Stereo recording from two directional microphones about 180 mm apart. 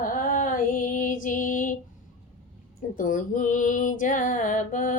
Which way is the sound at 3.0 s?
45° left (ahead or behind).